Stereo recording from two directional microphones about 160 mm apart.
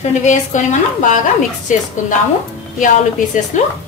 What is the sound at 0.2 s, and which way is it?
A woman's voice, 50° left (ahead or behind).